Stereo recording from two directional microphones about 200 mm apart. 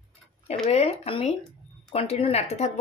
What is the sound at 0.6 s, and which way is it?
Speech, 30° left (ahead or behind).